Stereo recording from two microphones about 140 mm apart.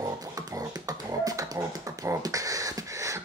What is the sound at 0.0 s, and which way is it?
Beatboxing, 25° right (ahead or behind).